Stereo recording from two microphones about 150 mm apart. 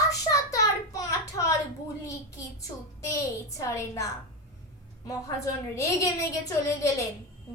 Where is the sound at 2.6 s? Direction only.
20° left (ahead or behind).